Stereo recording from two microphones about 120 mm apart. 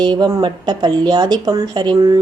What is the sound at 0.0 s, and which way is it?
Speech, 35° right (ahead or behind).